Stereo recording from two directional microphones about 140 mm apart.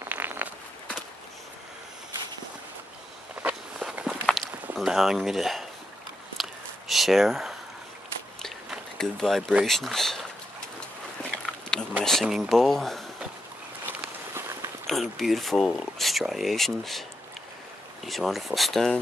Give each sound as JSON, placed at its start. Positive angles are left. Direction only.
{"t": 0.0, "sound": "a sound", "side_deg": -15}
{"t": 3.4, "sound": "walk", "side_deg": -5}
{"t": 4.7, "sound": "speech", "side_deg": -5}
{"t": 6.4, "sound": "a sound", "side_deg": 0}
{"t": 8.4, "sound": "speech", "side_deg": 5}
{"t": 12.0, "sound": "speech", "side_deg": 0}
{"t": 13.8, "sound": "walk", "side_deg": -15}
{"t": 14.9, "sound": "speech", "side_deg": 0}
{"t": 18.0, "sound": "speech", "side_deg": 0}